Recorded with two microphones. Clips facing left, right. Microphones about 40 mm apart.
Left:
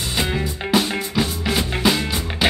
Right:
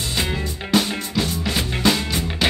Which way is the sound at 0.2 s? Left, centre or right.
Centre.